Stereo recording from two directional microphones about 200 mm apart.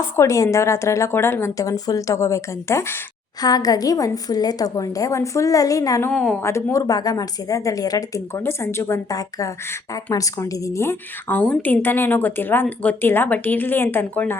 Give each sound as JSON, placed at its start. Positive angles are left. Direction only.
{"t": 0.2, "sound": "speech", "side_deg": 15}
{"t": 6.1, "sound": "speech", "side_deg": 5}